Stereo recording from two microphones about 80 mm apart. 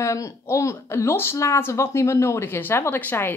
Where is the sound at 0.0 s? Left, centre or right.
Left.